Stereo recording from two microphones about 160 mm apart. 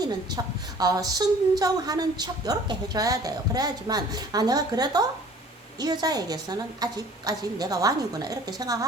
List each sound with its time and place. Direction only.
0.0 s a woman's voice: 25° right (ahead or behind)